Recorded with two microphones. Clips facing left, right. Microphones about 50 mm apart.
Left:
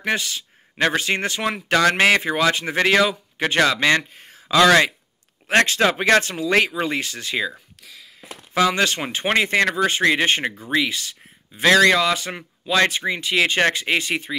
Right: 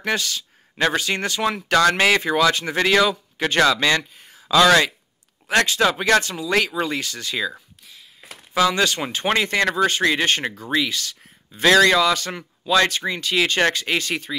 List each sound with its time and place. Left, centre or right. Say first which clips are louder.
0.0 s speech: even; left
4.1 s a sound: left 2 dB; left
5.5 s speech: left 1 dB; left
8.5 s speech: even; left
11.5 s speech: even; centre